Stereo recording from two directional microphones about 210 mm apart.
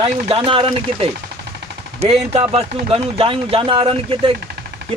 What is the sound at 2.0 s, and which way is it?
Speech, 30° right (ahead or behind).